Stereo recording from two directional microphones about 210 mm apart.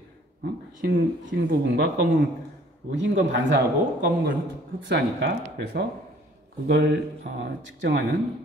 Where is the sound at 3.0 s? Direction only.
60° right (ahead or behind).